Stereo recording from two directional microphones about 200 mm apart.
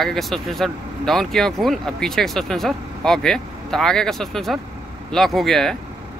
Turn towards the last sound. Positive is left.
turn(degrees=0)  # may be behind; listen again after turning